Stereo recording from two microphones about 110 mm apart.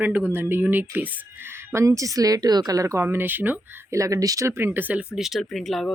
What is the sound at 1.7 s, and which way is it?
Speech, 30° right (ahead or behind).